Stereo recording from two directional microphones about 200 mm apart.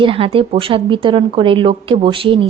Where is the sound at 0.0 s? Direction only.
25° right (ahead or behind).